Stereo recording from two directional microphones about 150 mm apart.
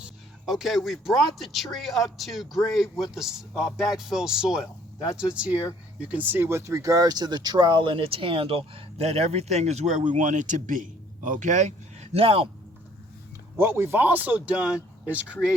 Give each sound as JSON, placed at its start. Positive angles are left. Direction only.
{"t": 0.0, "sound": "a man's voice", "side_deg": 0}
{"t": 13.6, "sound": "a man's voice", "side_deg": -15}